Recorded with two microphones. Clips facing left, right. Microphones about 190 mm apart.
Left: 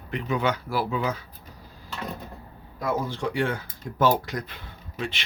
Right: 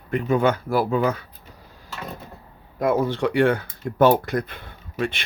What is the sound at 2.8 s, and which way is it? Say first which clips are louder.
Speech: right 7 dB; 60° right (ahead or behind).